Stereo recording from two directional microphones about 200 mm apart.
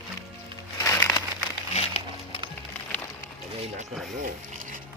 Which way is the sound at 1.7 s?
30° left (ahead or behind).